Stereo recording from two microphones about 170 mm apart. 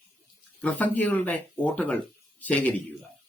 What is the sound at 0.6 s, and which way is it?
Speech, 10° left (ahead or behind).